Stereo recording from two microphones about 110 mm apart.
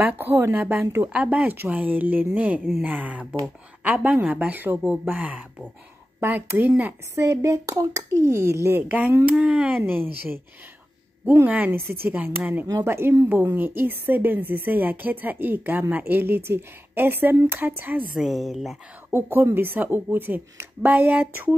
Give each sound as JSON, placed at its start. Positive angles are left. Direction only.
{"t": 0.0, "sound": "a woman's voice", "side_deg": -20}
{"t": 8.9, "sound": "a woman's voice", "side_deg": -15}
{"t": 11.2, "sound": "a woman's voice", "side_deg": -15}
{"t": 12.6, "sound": "a woman's voice", "side_deg": -30}
{"t": 18.2, "sound": "a woman's voice", "side_deg": -5}
{"t": 19.0, "sound": "a woman's voice", "side_deg": -20}